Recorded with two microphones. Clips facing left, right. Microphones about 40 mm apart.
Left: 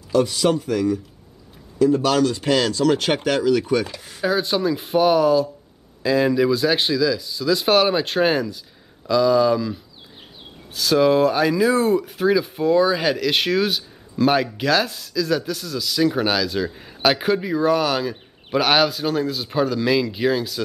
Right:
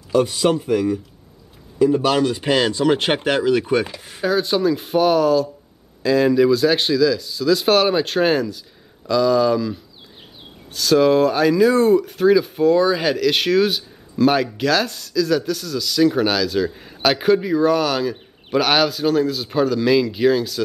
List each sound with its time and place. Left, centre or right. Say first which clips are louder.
0.1 s speech: right 1 dB; centre
3.9 s speech: right 1 dB; centre
4.2 s speech: right 2 dB; centre